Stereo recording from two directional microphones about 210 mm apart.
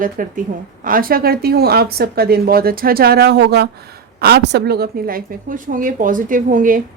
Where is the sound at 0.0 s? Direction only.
40° right (ahead or behind).